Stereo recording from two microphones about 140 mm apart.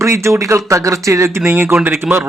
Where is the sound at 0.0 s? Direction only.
20° right (ahead or behind).